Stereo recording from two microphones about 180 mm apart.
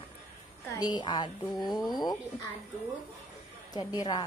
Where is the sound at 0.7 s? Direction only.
20° left (ahead or behind).